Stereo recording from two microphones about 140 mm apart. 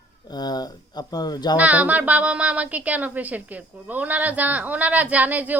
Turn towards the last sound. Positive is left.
turn(degrees=-10)  # may be behind; listen again after turning